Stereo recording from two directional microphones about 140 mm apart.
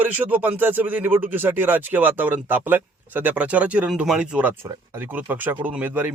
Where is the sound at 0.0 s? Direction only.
10° right (ahead or behind).